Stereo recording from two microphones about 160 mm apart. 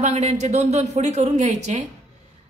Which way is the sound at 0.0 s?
45° right (ahead or behind).